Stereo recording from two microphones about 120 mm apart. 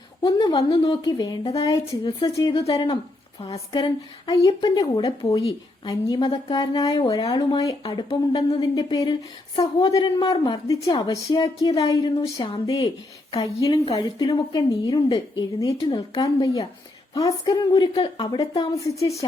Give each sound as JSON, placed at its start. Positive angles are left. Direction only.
{"t": 0.3, "sound": "a woman's voice", "side_deg": 35}
{"t": 1.6, "sound": "a woman's voice", "side_deg": 25}
{"t": 7.9, "sound": "speech", "side_deg": 50}
{"t": 8.5, "sound": "a woman's voice", "side_deg": 35}
{"t": 9.9, "sound": "a woman's voice", "side_deg": 35}
{"t": 12.4, "sound": "speech", "side_deg": 45}
{"t": 12.6, "sound": "a woman's voice", "side_deg": 30}
{"t": 18.7, "sound": "a woman's voice", "side_deg": 25}